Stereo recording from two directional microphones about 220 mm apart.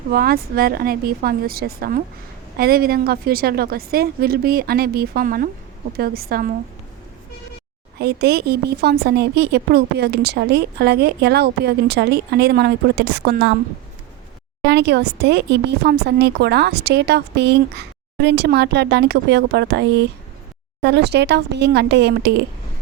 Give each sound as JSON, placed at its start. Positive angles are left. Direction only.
{"t": 0.1, "sound": "a woman's voice", "side_deg": -45}
{"t": 7.9, "sound": "a woman's voice", "side_deg": -45}
{"t": 14.7, "sound": "a woman's voice", "side_deg": -50}